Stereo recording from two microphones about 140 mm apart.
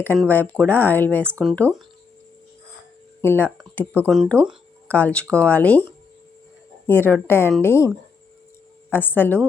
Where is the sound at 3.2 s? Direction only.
15° left (ahead or behind).